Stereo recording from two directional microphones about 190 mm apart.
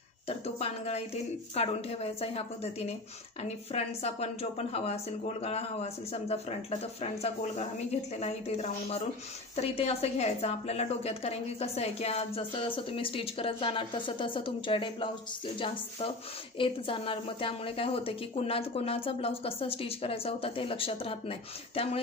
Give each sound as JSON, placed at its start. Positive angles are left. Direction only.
{"t": 0.3, "sound": "a woman's voice", "side_deg": 35}
{"t": 16.5, "sound": "a woman's voice", "side_deg": 25}